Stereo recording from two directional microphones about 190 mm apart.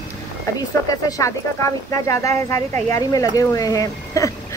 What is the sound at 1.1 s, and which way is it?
Speech, 15° left (ahead or behind).